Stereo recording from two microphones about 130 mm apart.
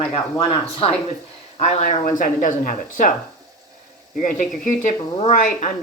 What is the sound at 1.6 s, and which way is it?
Speech, 60° left (ahead or behind).